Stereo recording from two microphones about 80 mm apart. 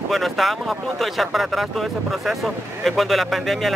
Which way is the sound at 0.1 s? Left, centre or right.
Centre.